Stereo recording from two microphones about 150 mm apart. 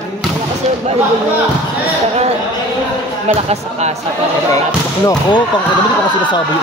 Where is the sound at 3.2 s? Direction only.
45° right (ahead or behind).